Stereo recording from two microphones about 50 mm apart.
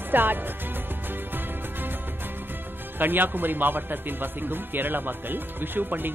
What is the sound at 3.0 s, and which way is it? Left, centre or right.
Speech, right.